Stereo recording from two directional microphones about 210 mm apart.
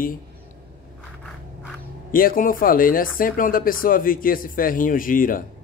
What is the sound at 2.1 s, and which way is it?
Speech, 40° left (ahead or behind).